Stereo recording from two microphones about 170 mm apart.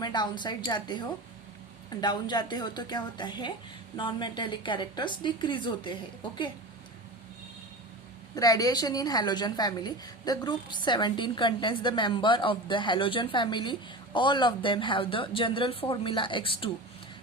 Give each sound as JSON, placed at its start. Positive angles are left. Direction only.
{"t": 0.0, "sound": "a woman's voice", "side_deg": 25}
{"t": 8.4, "sound": "a woman's voice", "side_deg": 20}